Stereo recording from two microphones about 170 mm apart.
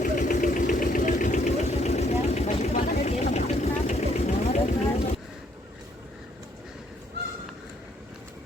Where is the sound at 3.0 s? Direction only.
40° left (ahead or behind).